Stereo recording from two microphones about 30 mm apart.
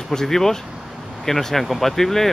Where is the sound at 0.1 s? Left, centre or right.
Centre.